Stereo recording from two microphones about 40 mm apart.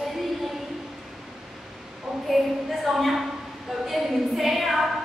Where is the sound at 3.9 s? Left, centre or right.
Centre.